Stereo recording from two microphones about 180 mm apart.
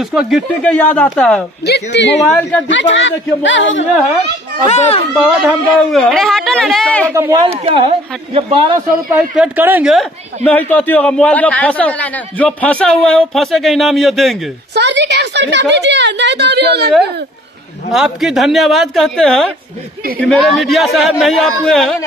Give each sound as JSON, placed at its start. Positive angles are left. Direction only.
{"t": 0.0, "sound": "a man's voice", "side_deg": -5}
{"t": 1.7, "sound": "a woman's voice", "side_deg": 75}
{"t": 2.7, "sound": "speech", "side_deg": 90}
{"t": 4.6, "sound": "a child's voice", "side_deg": 40}
{"t": 5.1, "sound": "a man's voice", "side_deg": -5}
{"t": 7.1, "sound": "speech", "side_deg": -15}
{"t": 7.6, "sound": "a woman's voice", "side_deg": -30}
{"t": 9.4, "sound": "speech", "side_deg": -10}
{"t": 10.4, "sound": "a man's voice", "side_deg": 10}
{"t": 14.7, "sound": "a woman's voice", "side_deg": -70}
{"t": 17.9, "sound": "a man's voice", "side_deg": 0}